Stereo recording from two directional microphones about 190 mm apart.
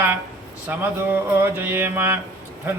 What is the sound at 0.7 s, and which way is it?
Speech, 10° right (ahead or behind).